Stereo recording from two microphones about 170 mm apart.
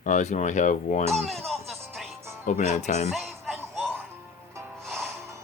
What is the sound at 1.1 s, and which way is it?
Speech, centre (ahead or behind).